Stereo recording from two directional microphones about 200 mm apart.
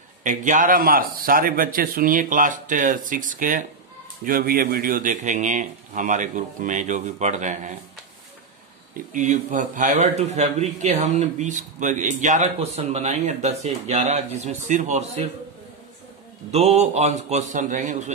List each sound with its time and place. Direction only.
0.2 s a man's voice: 40° right (ahead or behind)
8.9 s a man's voice: 40° right (ahead or behind)
16.5 s a man's voice: 35° right (ahead or behind)